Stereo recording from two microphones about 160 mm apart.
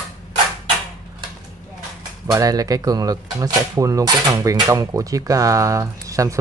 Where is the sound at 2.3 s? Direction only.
20° right (ahead or behind).